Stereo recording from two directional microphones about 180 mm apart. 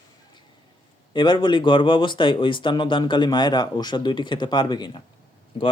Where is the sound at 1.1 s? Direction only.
25° left (ahead or behind).